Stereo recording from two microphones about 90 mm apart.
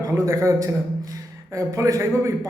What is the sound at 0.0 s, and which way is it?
A man's voice, 30° right (ahead or behind).